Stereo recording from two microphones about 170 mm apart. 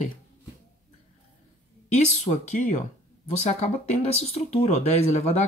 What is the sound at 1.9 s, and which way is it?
Speech, 45° left (ahead or behind).